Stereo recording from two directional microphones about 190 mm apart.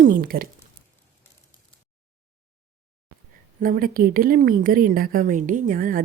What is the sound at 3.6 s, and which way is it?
Speech, 50° right (ahead or behind).